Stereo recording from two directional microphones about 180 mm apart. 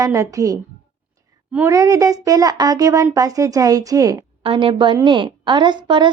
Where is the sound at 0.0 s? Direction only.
15° right (ahead or behind).